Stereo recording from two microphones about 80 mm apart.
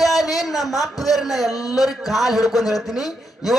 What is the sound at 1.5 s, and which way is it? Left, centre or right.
Speech, left.